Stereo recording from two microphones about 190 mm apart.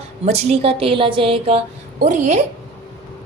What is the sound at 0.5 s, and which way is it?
A woman's voice, 30° right (ahead or behind).